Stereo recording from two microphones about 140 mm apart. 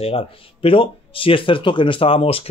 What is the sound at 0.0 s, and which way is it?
Speech, 40° left (ahead or behind).